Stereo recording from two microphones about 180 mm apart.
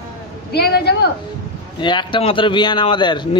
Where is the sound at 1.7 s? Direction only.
25° left (ahead or behind).